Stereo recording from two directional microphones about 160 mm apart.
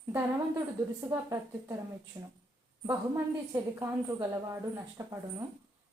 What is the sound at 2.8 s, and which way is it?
A woman's voice, 15° right (ahead or behind).